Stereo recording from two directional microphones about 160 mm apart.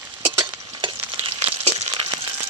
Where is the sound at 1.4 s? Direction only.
40° right (ahead or behind).